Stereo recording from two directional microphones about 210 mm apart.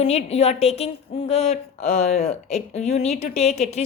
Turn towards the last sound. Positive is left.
turn(degrees=30)  # may be behind; listen again after turning